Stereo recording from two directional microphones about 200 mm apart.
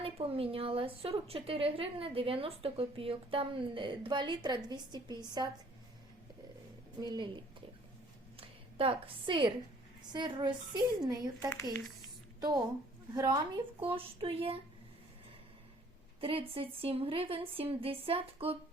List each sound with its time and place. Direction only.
0.0 s a woman's voice: 30° right (ahead or behind)
7.0 s a woman's voice: 20° right (ahead or behind)
8.4 s a woman's voice: 25° right (ahead or behind)
12.4 s a woman's voice: 20° right (ahead or behind)
16.2 s a woman's voice: 30° right (ahead or behind)